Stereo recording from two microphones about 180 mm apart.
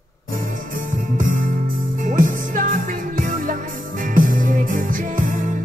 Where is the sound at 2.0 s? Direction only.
45° right (ahead or behind).